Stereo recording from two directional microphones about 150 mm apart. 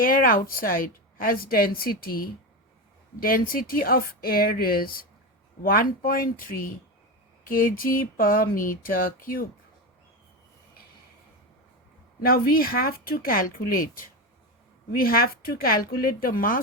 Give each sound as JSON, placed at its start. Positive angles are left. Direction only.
{"t": 0.0, "sound": "a woman's voice", "side_deg": 65}
{"t": 12.2, "sound": "a woman's voice", "side_deg": 75}
{"t": 14.9, "sound": "a woman's voice", "side_deg": 80}